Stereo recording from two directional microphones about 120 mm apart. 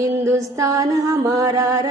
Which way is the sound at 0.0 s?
25° right (ahead or behind).